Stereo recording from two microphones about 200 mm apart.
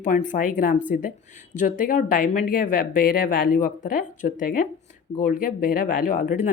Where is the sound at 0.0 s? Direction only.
40° left (ahead or behind).